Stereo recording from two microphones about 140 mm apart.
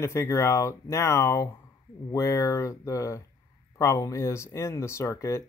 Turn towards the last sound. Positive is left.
turn(degrees=20)  # may be behind; listen again after turning